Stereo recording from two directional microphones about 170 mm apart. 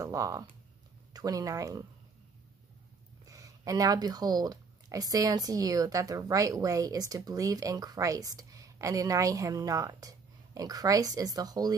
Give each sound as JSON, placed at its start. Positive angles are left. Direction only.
{"t": 0.0, "sound": "speech", "side_deg": -20}
{"t": 3.3, "sound": "speech", "side_deg": -20}